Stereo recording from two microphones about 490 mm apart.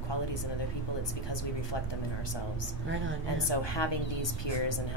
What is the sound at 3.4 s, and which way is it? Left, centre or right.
A woman's voice, left.